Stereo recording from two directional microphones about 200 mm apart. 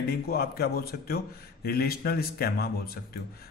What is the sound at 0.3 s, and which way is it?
A man's voice, 50° left (ahead or behind).